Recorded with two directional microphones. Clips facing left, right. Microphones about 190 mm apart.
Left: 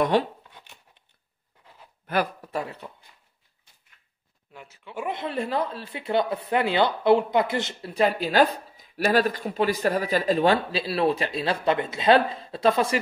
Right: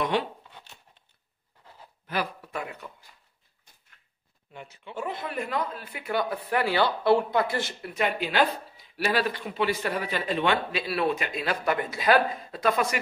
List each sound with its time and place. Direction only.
2.0 s speech: 50° left (ahead or behind)
2.5 s speech: 30° left (ahead or behind)
4.5 s speech: 5° left (ahead or behind)
5.0 s speech: 25° left (ahead or behind)
7.9 s speech: 35° left (ahead or behind)